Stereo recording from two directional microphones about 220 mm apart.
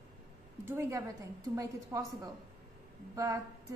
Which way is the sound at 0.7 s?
15° right (ahead or behind).